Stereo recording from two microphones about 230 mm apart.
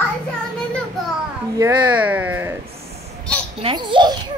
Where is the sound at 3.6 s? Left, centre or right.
Right.